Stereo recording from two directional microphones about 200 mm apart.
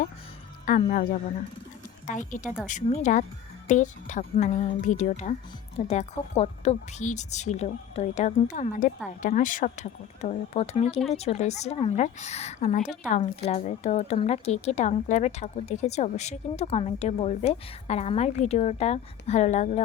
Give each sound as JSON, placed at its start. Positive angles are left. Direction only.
{"t": 0.6, "sound": "a woman's voice", "side_deg": 40}